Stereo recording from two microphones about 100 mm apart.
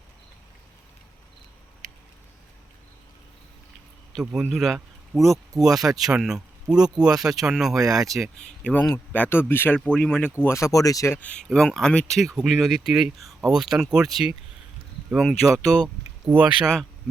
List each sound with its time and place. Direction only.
4.1 s a man's voice: centre (ahead or behind)
10.4 s speech: 30° left (ahead or behind)
11.1 s speech: 15° left (ahead or behind)
16.3 s speech: 20° right (ahead or behind)